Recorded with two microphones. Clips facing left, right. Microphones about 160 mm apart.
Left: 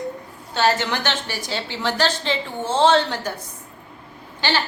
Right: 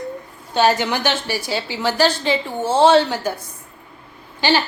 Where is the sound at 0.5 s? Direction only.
15° right (ahead or behind).